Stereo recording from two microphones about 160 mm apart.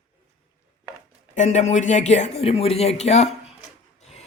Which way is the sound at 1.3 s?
45° left (ahead or behind).